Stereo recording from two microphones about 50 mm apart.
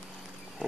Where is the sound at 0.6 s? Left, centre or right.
Centre.